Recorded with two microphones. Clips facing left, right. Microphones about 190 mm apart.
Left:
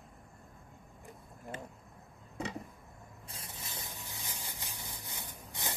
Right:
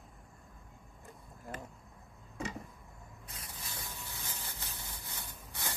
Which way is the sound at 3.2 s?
25° left (ahead or behind).